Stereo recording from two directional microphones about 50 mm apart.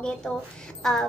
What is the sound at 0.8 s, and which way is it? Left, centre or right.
Speech, centre.